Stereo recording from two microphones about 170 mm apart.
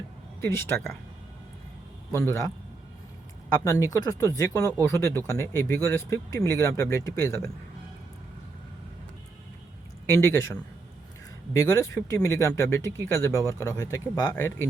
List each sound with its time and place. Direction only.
0.4 s speech: 10° left (ahead or behind)
2.1 s speech: 15° left (ahead or behind)
3.6 s speech: 20° left (ahead or behind)
11.5 s speech: 15° left (ahead or behind)